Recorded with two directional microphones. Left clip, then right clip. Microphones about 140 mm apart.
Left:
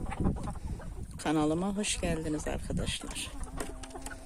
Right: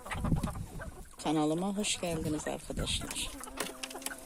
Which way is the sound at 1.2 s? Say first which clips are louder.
Left 1 dB; 5° left (ahead or behind).